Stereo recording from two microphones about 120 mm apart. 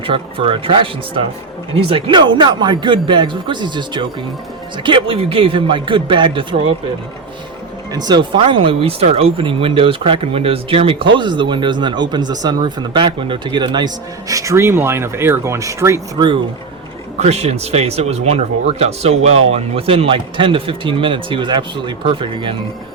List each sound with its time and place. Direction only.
0.0 s speech: 50° right (ahead or behind)
7.9 s speech: 35° right (ahead or behind)
16.1 s speech: 40° right (ahead or behind)
17.2 s speech: 60° right (ahead or behind); by 22.5 s 45° right (ahead or behind)